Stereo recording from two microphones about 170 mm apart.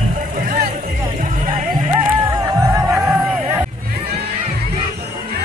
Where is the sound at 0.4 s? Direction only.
50° right (ahead or behind).